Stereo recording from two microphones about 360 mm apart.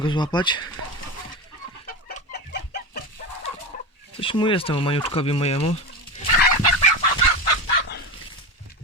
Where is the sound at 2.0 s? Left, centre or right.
Left.